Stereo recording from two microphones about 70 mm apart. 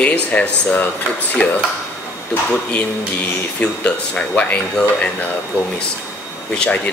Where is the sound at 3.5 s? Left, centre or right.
Centre.